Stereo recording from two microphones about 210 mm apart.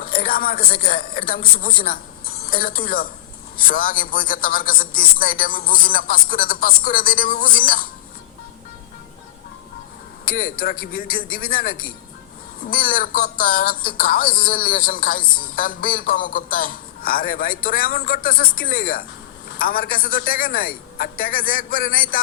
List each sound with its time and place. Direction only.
0.0 s speech: 45° left (ahead or behind)
10.2 s speech: 45° left (ahead or behind)